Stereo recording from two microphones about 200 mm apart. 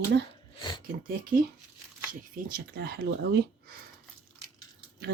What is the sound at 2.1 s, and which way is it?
Speech, 45° right (ahead or behind).